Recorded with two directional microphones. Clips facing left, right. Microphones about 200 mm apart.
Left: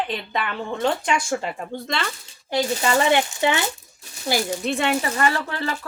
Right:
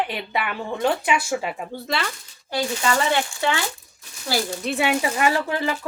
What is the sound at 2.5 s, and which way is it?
Speech, 25° left (ahead or behind).